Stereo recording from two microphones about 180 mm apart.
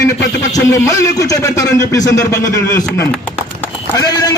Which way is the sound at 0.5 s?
20° left (ahead or behind).